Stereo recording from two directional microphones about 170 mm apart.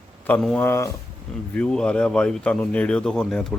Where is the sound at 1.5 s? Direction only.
5° left (ahead or behind).